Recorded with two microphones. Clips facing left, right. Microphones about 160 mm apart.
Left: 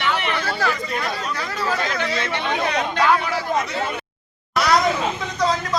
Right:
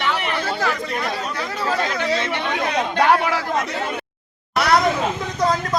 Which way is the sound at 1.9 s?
15° right (ahead or behind).